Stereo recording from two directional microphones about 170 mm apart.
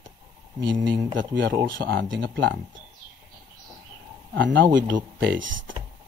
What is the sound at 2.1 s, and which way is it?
Speech, 90° right.